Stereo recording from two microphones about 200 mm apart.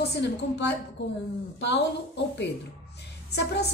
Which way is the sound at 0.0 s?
55° left (ahead or behind).